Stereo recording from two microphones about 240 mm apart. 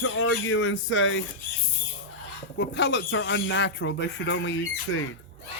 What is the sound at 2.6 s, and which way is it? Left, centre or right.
Speech, left.